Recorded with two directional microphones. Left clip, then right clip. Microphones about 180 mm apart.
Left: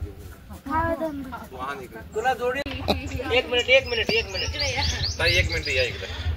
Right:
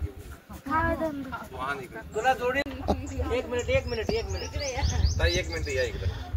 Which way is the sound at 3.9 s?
20° right (ahead or behind).